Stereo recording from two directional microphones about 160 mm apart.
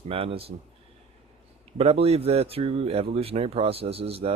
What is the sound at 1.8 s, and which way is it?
Speech, 40° right (ahead or behind).